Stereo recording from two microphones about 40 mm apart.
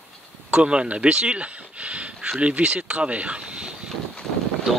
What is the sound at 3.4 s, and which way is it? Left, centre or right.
Boat, right.